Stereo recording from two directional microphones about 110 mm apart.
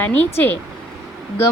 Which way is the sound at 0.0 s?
20° left (ahead or behind).